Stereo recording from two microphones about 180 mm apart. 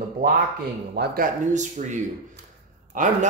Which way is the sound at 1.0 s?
70° right (ahead or behind).